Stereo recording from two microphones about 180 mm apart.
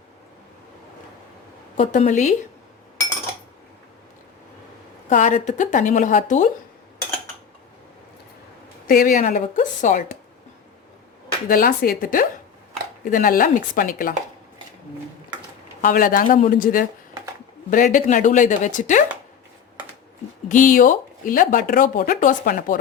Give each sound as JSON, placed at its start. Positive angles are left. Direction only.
{"t": 1.7, "sound": "speech", "side_deg": 45}
{"t": 5.0, "sound": "speech", "side_deg": 45}
{"t": 8.9, "sound": "speech", "side_deg": 50}
{"t": 11.4, "sound": "speech", "side_deg": 50}
{"t": 15.8, "sound": "speech", "side_deg": 50}
{"t": 20.5, "sound": "speech", "side_deg": 45}